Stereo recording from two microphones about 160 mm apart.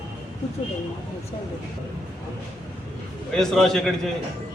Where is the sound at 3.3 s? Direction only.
Centre (ahead or behind).